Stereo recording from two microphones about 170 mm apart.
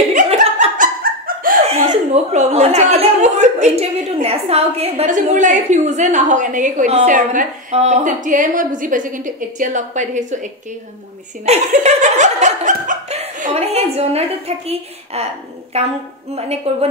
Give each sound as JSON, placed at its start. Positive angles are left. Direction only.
{"t": 0.1, "sound": "laughter", "side_deg": -45}
{"t": 1.2, "sound": "a sound", "side_deg": -55}
{"t": 1.7, "sound": "speech", "side_deg": -40}
{"t": 11.4, "sound": "laughter", "side_deg": -40}